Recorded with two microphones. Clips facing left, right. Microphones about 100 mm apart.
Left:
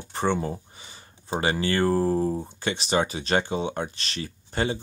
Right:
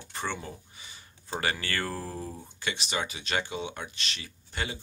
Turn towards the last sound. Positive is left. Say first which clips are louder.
# left 9 dB
turn(degrees=35)  # may be behind; listen again after turning